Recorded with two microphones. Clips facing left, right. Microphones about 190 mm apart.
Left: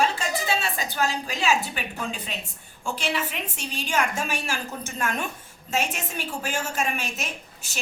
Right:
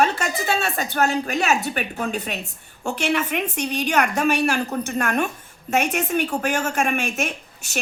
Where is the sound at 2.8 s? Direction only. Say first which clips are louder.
Right 6 dB; 65° right (ahead or behind).